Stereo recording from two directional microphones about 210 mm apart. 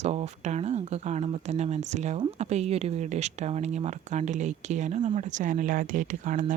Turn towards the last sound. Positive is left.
turn(degrees=-40)  # may be behind; listen again after turning